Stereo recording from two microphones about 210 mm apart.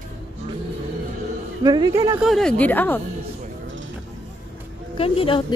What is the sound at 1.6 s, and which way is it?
Speech, 20° right (ahead or behind).